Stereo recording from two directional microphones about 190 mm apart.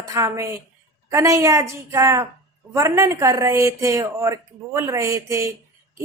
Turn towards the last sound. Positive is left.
turn(degrees=-15)  # may be behind; listen again after turning